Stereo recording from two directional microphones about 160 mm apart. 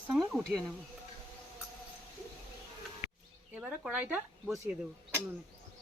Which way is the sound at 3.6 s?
5° right (ahead or behind).